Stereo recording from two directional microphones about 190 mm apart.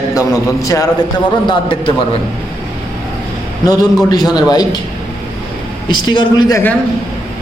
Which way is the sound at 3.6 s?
20° left (ahead or behind).